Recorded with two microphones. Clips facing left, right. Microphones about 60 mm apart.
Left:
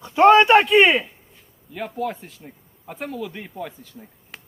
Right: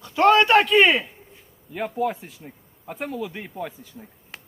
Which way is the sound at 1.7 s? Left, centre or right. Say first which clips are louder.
Right 2 dB; centre.